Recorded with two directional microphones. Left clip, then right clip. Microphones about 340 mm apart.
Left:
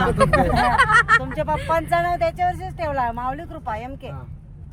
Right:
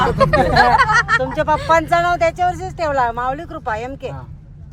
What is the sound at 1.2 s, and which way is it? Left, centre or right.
Speech, right.